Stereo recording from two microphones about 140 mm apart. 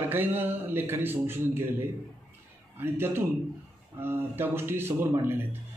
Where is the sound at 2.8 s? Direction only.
15° right (ahead or behind).